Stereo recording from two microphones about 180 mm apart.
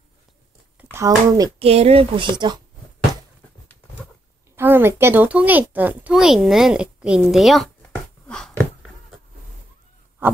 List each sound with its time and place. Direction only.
0.7 s speech: 15° right (ahead or behind)
1.6 s a woman's voice: 35° right (ahead or behind)
4.6 s speech: 10° right (ahead or behind)
8.3 s a sound: 5° left (ahead or behind)